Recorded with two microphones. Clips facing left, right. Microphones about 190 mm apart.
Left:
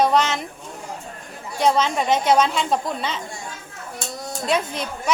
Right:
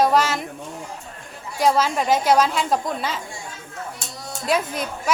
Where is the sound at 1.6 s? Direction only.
Centre (ahead or behind).